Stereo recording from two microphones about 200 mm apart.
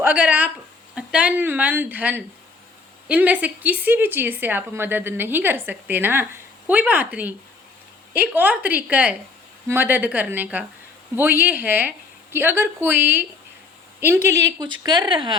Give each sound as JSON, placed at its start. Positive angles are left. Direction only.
{"t": 0.0, "sound": "a woman's voice", "side_deg": -10}